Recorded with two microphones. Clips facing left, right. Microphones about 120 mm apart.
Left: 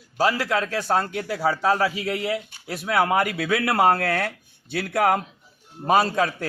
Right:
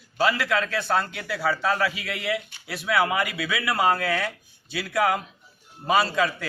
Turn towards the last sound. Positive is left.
turn(degrees=45)  # may be behind; listen again after turning